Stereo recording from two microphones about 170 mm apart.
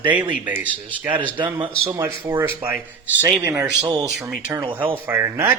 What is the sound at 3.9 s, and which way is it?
A man's voice, 20° right (ahead or behind).